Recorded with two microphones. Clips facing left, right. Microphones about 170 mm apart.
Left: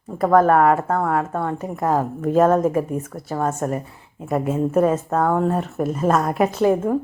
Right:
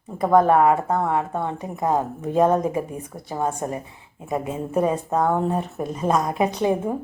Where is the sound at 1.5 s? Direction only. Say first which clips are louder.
Left 2 dB; 15° right (ahead or behind).